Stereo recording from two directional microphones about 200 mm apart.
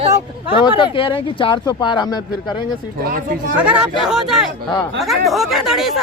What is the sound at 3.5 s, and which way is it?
Speech, 5° right (ahead or behind).